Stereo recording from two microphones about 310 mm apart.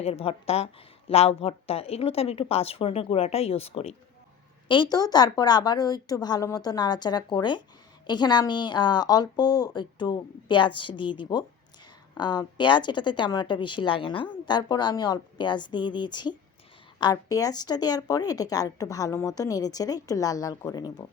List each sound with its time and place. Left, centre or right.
0.0 s a woman's voice: centre